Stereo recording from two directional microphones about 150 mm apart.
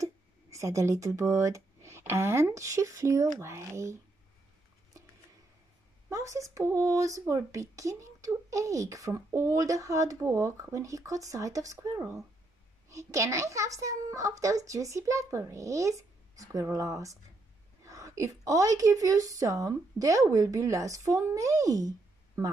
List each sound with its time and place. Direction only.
0.0 s speech: 20° right (ahead or behind)
6.0 s speech: 20° right (ahead or behind)